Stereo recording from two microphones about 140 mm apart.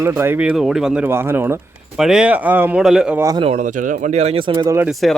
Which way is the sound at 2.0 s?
5° right (ahead or behind).